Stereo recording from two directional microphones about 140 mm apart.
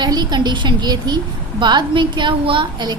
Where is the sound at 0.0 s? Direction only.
30° right (ahead or behind).